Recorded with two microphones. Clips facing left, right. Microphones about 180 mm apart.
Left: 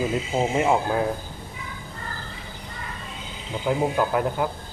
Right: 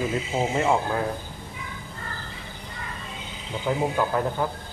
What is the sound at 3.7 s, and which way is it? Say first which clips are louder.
Speech: left 2 dB; 10° left (ahead or behind).